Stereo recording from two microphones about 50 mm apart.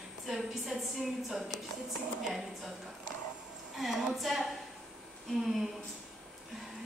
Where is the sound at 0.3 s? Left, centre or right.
Centre.